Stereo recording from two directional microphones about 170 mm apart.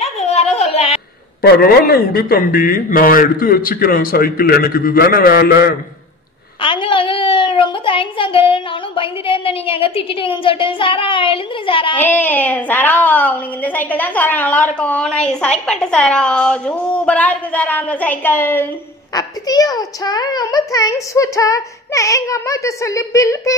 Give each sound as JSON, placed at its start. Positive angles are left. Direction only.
{"t": 0.0, "sound": "a sound", "side_deg": 40}
{"t": 1.4, "sound": "a man's voice", "side_deg": 65}
{"t": 6.6, "sound": "a child's voice", "side_deg": 30}
{"t": 12.0, "sound": "a woman's voice", "side_deg": 10}